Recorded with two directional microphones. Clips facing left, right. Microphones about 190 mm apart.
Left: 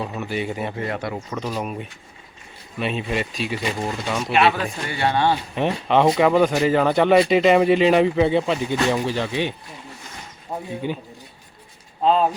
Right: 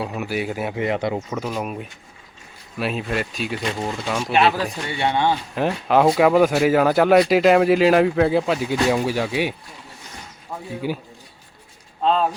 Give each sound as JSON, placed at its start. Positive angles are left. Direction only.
{"t": 0.0, "sound": "speech", "side_deg": -10}
{"t": 0.8, "sound": "speech", "side_deg": -20}
{"t": 1.3, "sound": "speech", "side_deg": -5}
{"t": 4.9, "sound": "speech", "side_deg": -20}
{"t": 5.5, "sound": "speech", "side_deg": -5}
{"t": 10.8, "sound": "speech", "side_deg": -5}
{"t": 12.0, "sound": "speech", "side_deg": 5}